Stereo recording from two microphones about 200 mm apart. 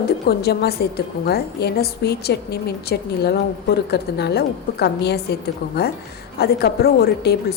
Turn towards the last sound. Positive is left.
turn(degrees=55)  # may be behind; listen again after turning